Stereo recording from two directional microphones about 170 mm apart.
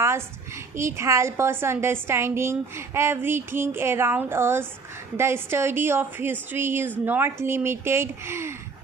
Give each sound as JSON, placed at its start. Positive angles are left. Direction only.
{"t": 0.0, "sound": "a woman's voice", "side_deg": -15}